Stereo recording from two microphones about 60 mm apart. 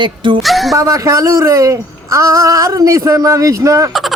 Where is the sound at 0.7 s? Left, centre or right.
Right.